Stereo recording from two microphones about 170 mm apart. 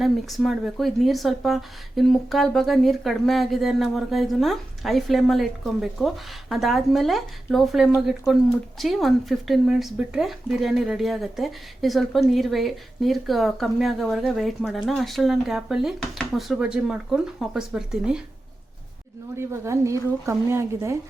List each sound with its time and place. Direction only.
0.0 s speech: centre (ahead or behind)
19.4 s speech: 15° right (ahead or behind)